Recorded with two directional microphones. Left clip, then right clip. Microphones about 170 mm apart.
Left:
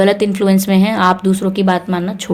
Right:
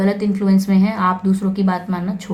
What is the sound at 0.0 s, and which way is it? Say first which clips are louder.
Speech: left 7 dB; 35° left (ahead or behind).